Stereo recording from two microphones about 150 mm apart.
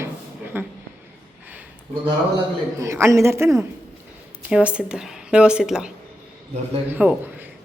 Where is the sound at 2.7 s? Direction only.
20° right (ahead or behind).